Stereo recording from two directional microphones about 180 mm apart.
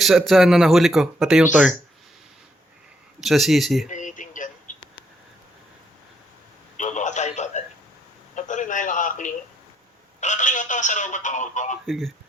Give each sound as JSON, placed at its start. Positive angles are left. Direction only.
{"t": 0.0, "sound": "speech", "side_deg": 0}
{"t": 3.2, "sound": "speech", "side_deg": 0}
{"t": 3.8, "sound": "a sound", "side_deg": 45}
{"t": 6.7, "sound": "a sound", "side_deg": 45}
{"t": 10.2, "sound": "telephone", "side_deg": 40}
{"t": 11.9, "sound": "speech", "side_deg": 0}